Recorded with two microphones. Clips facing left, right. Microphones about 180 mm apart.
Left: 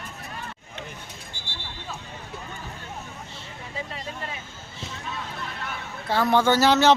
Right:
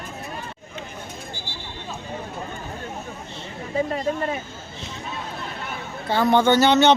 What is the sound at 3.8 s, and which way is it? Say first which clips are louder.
Speech: right 12 dB; 50° right (ahead or behind).